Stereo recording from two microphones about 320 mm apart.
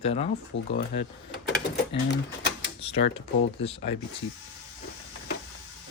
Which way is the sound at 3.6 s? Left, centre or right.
Centre.